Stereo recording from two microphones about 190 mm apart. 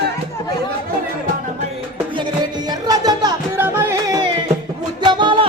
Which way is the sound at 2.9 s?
20° right (ahead or behind).